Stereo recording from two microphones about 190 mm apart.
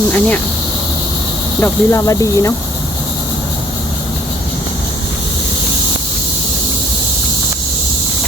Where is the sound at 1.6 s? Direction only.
15° left (ahead or behind).